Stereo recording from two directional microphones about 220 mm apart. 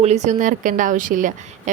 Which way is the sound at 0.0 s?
30° right (ahead or behind).